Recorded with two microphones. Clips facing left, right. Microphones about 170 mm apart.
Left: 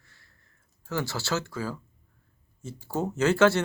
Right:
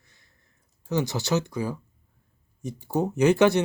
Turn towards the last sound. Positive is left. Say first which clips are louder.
# right 2 dB
turn(degrees=-15)  # may be behind; listen again after turning